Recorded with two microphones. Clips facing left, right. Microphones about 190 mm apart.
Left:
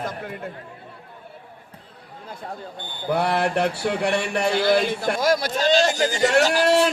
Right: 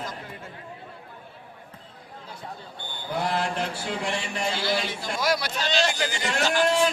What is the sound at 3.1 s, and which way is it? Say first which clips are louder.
Speech: left 6 dB; 65° left (ahead or behind).